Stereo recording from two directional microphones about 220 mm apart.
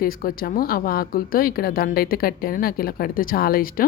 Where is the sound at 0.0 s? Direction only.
40° left (ahead or behind).